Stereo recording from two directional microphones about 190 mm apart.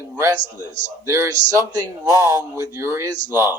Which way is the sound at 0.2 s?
15° right (ahead or behind).